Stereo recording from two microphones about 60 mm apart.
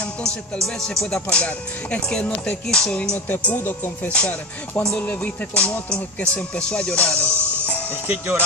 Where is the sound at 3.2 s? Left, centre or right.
Left.